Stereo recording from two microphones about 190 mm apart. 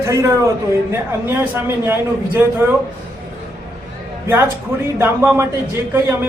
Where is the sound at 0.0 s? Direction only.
15° right (ahead or behind).